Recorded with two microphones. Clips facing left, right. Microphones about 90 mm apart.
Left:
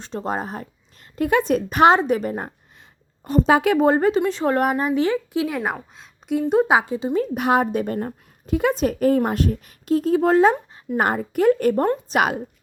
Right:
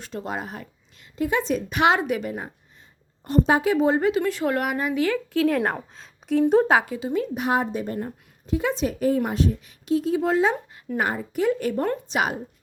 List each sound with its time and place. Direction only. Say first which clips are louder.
0.0 s speech: left 4 dB; 35° left (ahead or behind)
1.1 s a woman's voice: left 4 dB; 55° left (ahead or behind); by 2.5 s 40° left (ahead or behind)
3.5 s a woman's voice: left 5 dB; 65° left (ahead or behind); by 4.2 s 45° left (ahead or behind)
4.2 s speech: left 4 dB; 30° left (ahead or behind)
5.0 s speech: left 1 dB; 20° left (ahead or behind)
5.5 s a woman's voice: right 3 dB; 5° left (ahead or behind)
6.7 s speech: left 2 dB; 20° left (ahead or behind)
7.3 s a woman's voice: left 4 dB; 60° left (ahead or behind)
12.1 s a woman's voice: left 4 dB; 70° left (ahead or behind)